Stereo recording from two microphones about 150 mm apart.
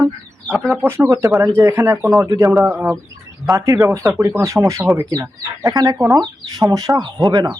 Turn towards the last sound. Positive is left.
turn(degrees=-30)  # may be behind; listen again after turning